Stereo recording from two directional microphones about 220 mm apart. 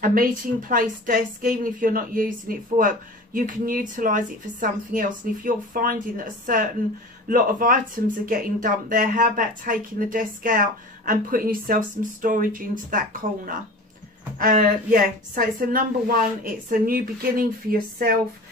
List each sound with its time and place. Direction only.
0.0 s a woman's voice: 40° right (ahead or behind)
14.4 s a woman's voice: 35° right (ahead or behind)